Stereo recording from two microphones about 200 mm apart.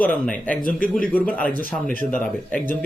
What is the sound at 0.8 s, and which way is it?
Speech, 45° left (ahead or behind).